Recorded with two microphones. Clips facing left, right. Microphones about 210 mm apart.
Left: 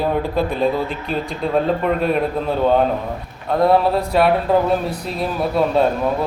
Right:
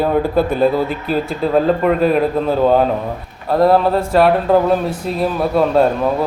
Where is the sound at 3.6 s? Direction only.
Centre (ahead or behind).